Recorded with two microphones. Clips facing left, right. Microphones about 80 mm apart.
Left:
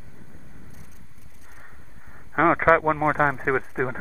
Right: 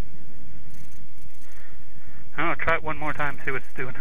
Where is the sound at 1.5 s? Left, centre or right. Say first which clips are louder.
Left 5 dB; left.